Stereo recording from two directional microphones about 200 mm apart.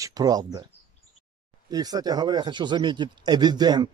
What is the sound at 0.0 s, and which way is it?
Speech, 20° right (ahead or behind).